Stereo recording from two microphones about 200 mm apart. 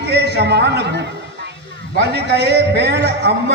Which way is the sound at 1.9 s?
55° right (ahead or behind).